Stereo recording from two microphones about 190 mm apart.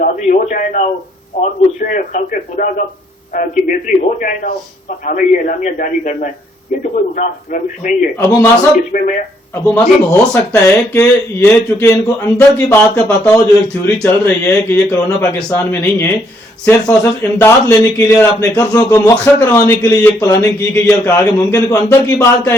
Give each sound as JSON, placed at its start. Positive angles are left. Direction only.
{"t": 0.0, "sound": "a man's voice", "side_deg": 40}
{"t": 8.1, "sound": "speech", "side_deg": 15}
{"t": 8.9, "sound": "a man's voice", "side_deg": 45}
{"t": 9.6, "sound": "speech", "side_deg": 15}